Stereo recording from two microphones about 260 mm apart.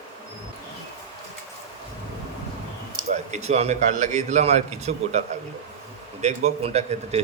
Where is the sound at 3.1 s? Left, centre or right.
Right.